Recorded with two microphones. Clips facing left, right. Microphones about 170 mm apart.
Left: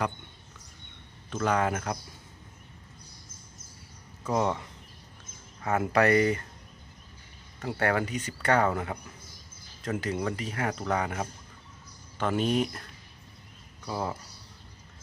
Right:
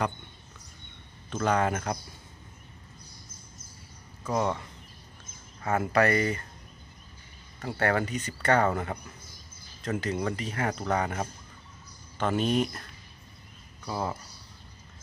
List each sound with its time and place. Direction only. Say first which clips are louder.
1.3 s speech: right 1 dB; 5° left (ahead or behind)
4.3 s speech: left 1 dB; 15° left (ahead or behind)
5.6 s speech: left 1 dB; 15° left (ahead or behind)
7.6 s speech: even; 15° left (ahead or behind)